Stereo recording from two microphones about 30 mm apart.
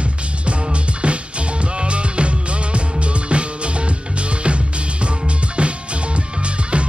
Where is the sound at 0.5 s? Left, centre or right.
Right.